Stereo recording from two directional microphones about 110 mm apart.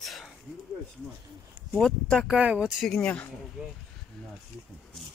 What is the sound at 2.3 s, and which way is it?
Speech, 10° right (ahead or behind).